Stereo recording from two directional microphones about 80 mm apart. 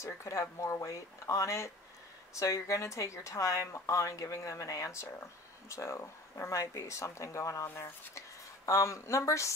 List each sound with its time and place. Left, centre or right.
0.0 s speech: left